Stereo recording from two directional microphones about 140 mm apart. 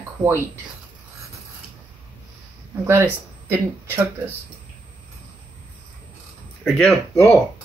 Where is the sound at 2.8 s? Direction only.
15° right (ahead or behind).